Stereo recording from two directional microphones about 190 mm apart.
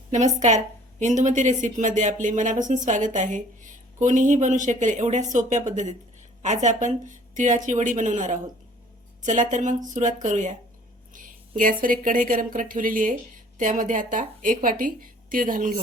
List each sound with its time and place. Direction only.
0.1 s a woman's voice: 40° right (ahead or behind)